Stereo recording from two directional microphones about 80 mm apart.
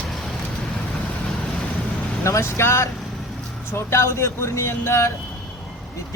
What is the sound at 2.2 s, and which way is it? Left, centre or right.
Speech, left.